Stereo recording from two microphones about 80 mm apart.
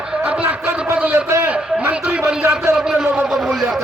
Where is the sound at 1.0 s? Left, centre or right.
Centre.